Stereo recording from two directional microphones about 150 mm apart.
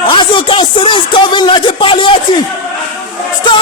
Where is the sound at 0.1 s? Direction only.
35° left (ahead or behind).